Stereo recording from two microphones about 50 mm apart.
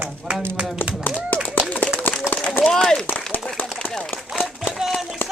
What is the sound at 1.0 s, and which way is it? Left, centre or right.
Speech, left.